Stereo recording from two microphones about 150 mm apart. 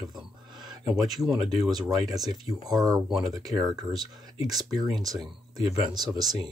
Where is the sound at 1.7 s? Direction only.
25° right (ahead or behind).